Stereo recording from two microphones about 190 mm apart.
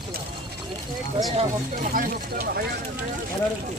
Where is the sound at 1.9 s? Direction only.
55° right (ahead or behind).